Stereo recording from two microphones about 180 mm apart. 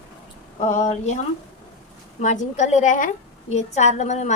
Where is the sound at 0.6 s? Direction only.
40° left (ahead or behind).